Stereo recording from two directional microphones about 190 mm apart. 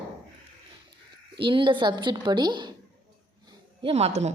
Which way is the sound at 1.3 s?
25° right (ahead or behind).